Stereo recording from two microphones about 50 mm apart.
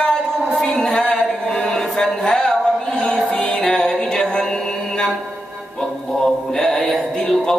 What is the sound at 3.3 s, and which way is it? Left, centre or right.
Music, centre.